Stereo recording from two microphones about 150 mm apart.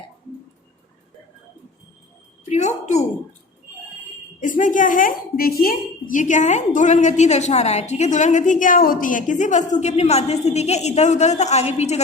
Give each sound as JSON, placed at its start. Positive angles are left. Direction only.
{"t": 2.5, "sound": "a woman's voice", "side_deg": 50}
{"t": 4.4, "sound": "a woman's voice", "side_deg": 60}